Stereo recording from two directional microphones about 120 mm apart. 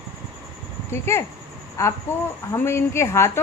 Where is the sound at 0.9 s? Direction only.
20° left (ahead or behind).